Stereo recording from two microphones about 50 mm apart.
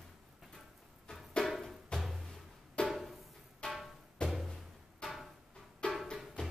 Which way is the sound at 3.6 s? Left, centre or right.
Centre.